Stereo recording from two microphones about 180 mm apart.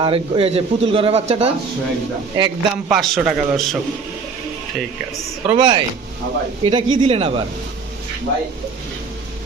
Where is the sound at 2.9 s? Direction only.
Centre (ahead or behind).